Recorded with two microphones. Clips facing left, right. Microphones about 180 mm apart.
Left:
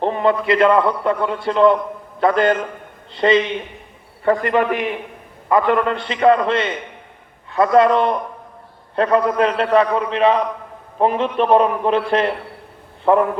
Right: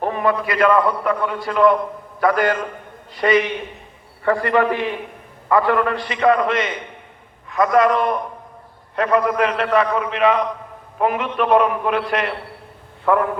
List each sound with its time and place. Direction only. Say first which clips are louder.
0.0 s a man's voice: left 2 dB; 25° left (ahead or behind)